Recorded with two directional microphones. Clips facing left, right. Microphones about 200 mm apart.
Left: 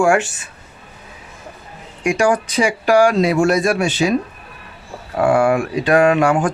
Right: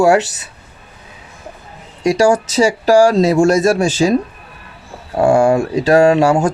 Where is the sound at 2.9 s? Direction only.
35° right (ahead or behind).